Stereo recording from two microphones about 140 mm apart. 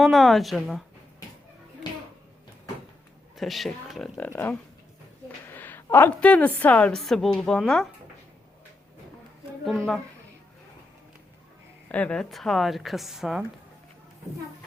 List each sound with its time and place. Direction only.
0.0 s a woman's voice: centre (ahead or behind)
3.3 s a woman's voice: centre (ahead or behind)
4.2 s a woman's voice: 15° left (ahead or behind)
11.9 s a woman's voice: 10° left (ahead or behind)